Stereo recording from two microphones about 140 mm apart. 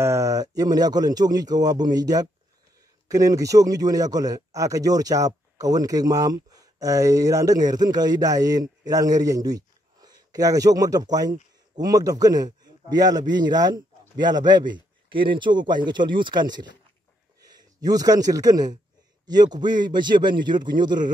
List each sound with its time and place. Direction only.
0.0 s a man's voice: 20° right (ahead or behind)